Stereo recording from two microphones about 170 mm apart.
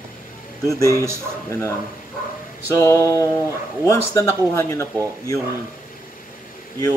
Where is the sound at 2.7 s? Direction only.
15° left (ahead or behind).